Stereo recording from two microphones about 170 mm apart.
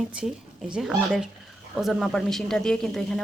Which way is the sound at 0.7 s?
5° right (ahead or behind).